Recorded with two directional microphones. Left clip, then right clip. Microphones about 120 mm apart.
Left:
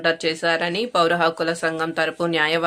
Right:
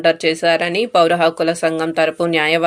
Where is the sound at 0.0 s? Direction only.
20° right (ahead or behind).